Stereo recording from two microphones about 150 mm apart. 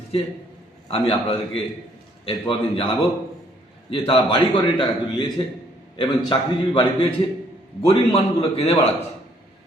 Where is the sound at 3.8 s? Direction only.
35° left (ahead or behind).